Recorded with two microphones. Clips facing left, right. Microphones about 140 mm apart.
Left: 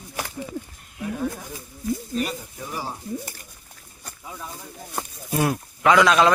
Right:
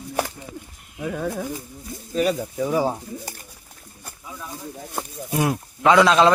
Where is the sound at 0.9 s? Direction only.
90° right.